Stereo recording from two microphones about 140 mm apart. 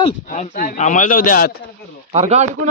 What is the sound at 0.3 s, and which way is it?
A man's voice, 70° left (ahead or behind).